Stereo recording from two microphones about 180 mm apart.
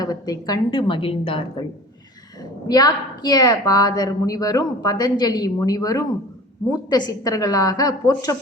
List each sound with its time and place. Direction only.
0.0 s a woman's voice: 20° left (ahead or behind)